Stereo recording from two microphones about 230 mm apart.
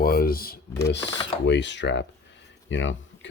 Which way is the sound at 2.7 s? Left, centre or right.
Left.